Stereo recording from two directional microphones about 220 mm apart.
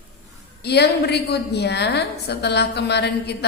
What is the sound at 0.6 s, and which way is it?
A woman's voice, 50° left (ahead or behind).